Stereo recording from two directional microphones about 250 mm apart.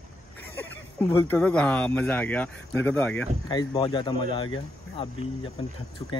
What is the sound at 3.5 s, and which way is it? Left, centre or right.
Speech, centre.